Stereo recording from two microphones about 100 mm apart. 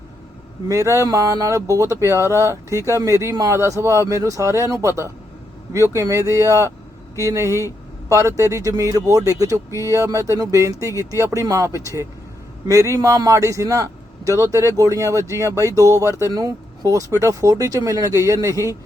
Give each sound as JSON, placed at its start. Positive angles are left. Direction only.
{"t": 0.7, "sound": "speech", "side_deg": -30}